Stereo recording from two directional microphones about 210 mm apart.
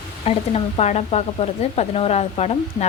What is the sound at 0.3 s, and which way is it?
A woman's voice, 30° left (ahead or behind).